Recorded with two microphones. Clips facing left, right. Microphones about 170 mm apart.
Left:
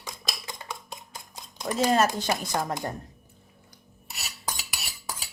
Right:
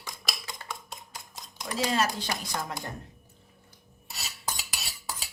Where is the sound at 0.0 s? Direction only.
20° left (ahead or behind).